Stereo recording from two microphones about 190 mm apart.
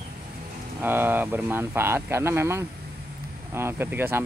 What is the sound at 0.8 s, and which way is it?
Speech, 10° right (ahead or behind).